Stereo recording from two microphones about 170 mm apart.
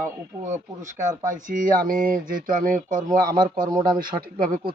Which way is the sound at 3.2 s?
25° right (ahead or behind).